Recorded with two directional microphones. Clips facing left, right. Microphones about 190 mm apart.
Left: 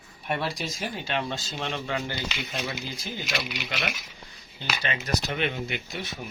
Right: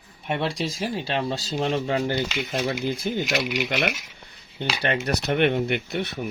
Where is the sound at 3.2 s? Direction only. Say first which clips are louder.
Right 4 dB; 45° right (ahead or behind).